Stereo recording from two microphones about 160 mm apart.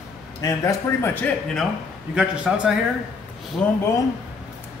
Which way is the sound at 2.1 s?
5° right (ahead or behind).